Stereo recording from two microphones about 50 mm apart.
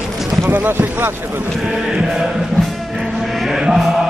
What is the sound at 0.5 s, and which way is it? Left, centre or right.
Boat, right.